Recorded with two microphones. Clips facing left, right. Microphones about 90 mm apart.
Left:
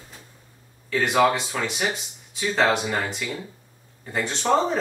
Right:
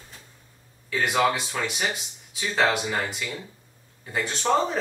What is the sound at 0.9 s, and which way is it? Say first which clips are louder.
Speech: left 3 dB; centre (ahead or behind).